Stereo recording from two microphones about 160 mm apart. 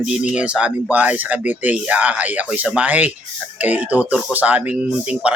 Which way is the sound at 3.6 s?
10° right (ahead or behind).